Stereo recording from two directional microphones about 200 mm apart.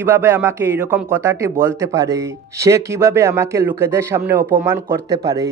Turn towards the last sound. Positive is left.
turn(degrees=-15)  # may be behind; listen again after turning